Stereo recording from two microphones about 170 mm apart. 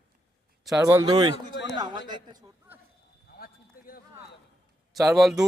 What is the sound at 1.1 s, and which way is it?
A man's voice, 30° right (ahead or behind).